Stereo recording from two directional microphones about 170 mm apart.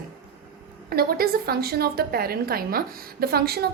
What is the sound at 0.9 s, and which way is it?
A woman's voice, 65° right (ahead or behind).